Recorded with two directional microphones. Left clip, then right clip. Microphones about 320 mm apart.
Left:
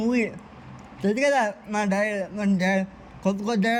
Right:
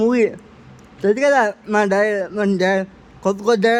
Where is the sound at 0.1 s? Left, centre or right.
Centre.